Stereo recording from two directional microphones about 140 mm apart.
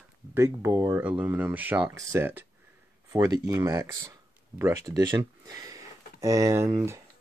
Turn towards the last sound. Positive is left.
turn(degrees=-20)  # may be behind; listen again after turning